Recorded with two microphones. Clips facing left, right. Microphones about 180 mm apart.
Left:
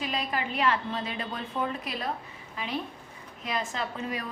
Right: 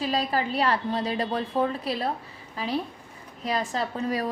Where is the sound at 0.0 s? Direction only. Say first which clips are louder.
Right 5 dB; 35° right (ahead or behind).